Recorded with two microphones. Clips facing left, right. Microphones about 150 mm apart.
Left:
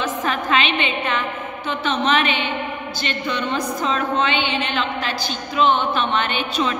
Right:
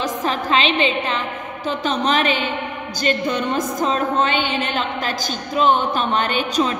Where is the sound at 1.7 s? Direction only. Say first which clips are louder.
Even; 40° right (ahead or behind).